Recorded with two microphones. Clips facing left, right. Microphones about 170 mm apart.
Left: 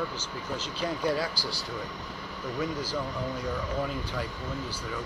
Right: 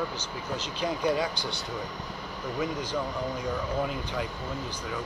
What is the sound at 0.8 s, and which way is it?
Speech, 15° right (ahead or behind).